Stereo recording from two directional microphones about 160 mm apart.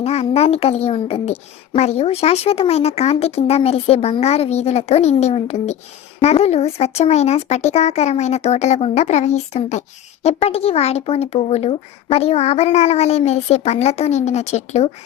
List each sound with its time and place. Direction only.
0.0 s a child's voice: 40° left (ahead or behind)